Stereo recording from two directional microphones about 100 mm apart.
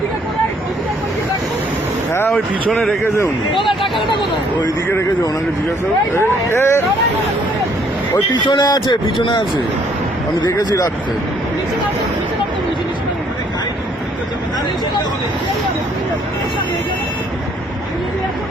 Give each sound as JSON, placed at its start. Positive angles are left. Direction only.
{"t": 2.6, "sound": "speech", "side_deg": 5}
{"t": 3.5, "sound": "speech", "side_deg": 55}
{"t": 6.1, "sound": "speech", "side_deg": 25}
{"t": 8.4, "sound": "speech", "side_deg": 45}
{"t": 10.4, "sound": "speech", "side_deg": 40}